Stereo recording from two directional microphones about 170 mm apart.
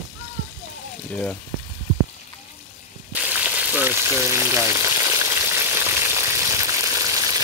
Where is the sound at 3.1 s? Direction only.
10° right (ahead or behind).